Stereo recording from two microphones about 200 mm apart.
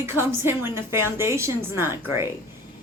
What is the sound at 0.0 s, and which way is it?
A woman's voice, 10° right (ahead or behind).